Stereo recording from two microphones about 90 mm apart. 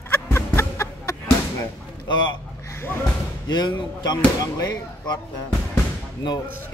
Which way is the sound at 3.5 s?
50° left (ahead or behind).